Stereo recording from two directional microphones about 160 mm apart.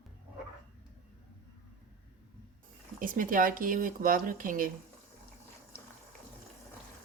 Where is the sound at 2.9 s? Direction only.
60° right (ahead or behind).